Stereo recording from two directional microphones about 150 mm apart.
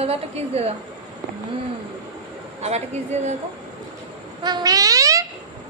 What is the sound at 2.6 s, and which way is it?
Speech, 45° right (ahead or behind).